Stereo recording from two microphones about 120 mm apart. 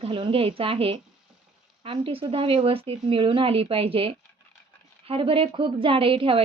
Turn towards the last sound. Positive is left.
turn(degrees=-50)  # may be behind; listen again after turning